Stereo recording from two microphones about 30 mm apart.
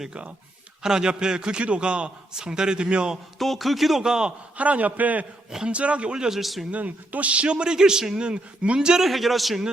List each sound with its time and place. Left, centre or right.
0.8 s a man's voice: right
2.3 s a man's voice: right
2.8 s speech: right
3.3 s a man's voice: centre
4.0 s a man's voice: right
4.5 s a man's voice: right
4.9 s a man's voice: right
5.6 s speech: right
6.3 s a man's voice: centre
6.7 s a man's voice: right
7.7 s a man's voice: right
8.2 s speech: right
9.0 s a man's voice: centre